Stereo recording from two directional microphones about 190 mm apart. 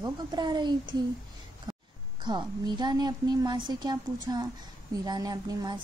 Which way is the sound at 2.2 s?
25° right (ahead or behind).